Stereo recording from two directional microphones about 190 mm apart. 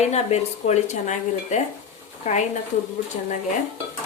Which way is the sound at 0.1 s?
35° left (ahead or behind).